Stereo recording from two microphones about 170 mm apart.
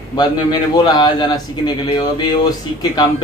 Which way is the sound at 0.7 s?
25° left (ahead or behind).